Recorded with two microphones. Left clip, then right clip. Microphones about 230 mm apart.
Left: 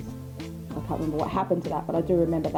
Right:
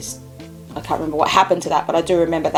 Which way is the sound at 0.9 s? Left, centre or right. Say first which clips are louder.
Right 10 dB; centre.